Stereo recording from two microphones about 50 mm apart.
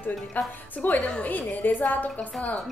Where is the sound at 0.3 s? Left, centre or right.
Left.